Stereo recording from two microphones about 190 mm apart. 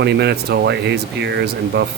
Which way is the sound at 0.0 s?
60° right (ahead or behind).